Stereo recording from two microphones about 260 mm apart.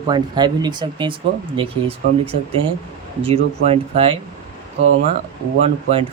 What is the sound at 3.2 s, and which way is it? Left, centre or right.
Speech, right.